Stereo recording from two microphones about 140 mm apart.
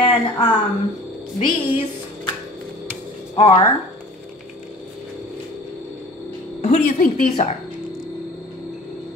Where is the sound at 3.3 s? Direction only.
40° left (ahead or behind).